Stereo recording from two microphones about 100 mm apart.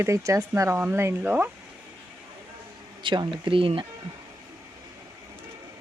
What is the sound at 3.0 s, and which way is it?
Speech, 55° right (ahead or behind).